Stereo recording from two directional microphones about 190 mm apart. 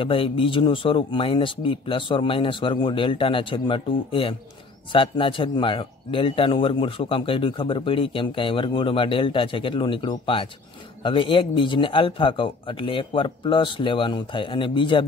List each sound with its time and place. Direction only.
0.0 s a man's voice: 30° left (ahead or behind)